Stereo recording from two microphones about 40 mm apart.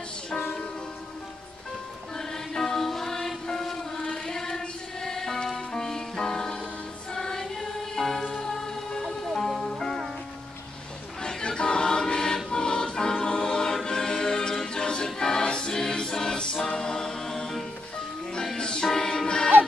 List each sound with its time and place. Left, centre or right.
2.1 s music: centre
11.2 s choir: left
13.8 s music: centre
15.1 s choir: centre
16.6 s a capella: centre
18.6 s music: left